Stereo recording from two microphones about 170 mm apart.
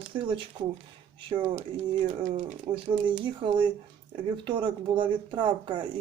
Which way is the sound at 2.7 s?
30° right (ahead or behind).